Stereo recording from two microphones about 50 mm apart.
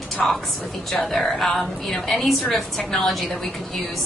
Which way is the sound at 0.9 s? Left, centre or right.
Centre.